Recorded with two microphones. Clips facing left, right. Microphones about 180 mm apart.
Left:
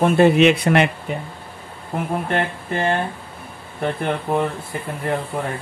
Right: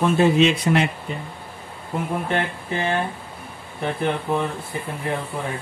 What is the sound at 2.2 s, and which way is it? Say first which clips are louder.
Speech: left 2 dB; 50° left (ahead or behind).